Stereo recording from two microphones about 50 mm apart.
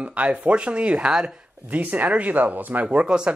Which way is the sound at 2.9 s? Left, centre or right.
Centre.